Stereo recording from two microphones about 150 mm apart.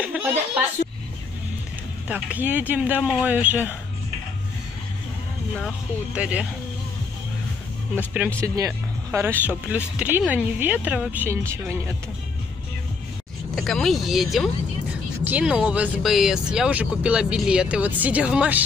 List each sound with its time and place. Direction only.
0.0 s a sound: 10° right (ahead or behind)
2.0 s speech: 10° right (ahead or behind)
5.6 s speech: 5° right (ahead or behind)
8.4 s speech: 20° right (ahead or behind)
13.6 s speech: centre (ahead or behind)